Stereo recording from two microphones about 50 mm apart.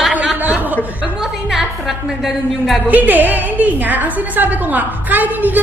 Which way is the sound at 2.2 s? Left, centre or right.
Centre.